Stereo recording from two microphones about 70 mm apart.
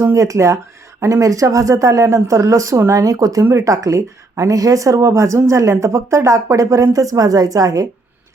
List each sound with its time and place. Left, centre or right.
0.0 s speech: right
3.0 s speech: right